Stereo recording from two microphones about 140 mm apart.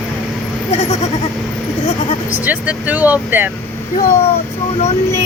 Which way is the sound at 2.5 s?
10° right (ahead or behind).